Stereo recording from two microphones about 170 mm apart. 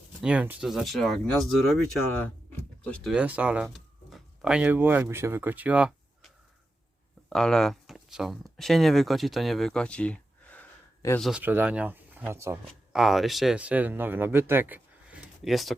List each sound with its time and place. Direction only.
0.2 s speech: 5° right (ahead or behind); by 11.2 s 10° left (ahead or behind)
11.2 s speech: 5° right (ahead or behind)
12.9 s speech: centre (ahead or behind)